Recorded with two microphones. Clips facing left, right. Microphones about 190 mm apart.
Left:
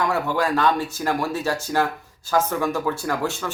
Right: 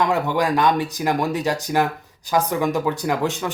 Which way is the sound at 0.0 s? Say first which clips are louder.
Right 2 dB; 20° right (ahead or behind).